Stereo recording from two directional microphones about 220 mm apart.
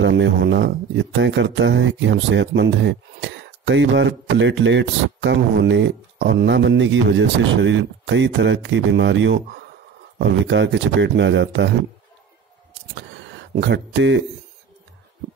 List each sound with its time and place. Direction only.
0.0 s speech: 55° right (ahead or behind)
12.9 s speech: 55° right (ahead or behind)